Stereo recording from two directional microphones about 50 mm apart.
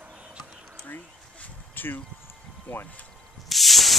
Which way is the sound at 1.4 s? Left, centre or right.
Left.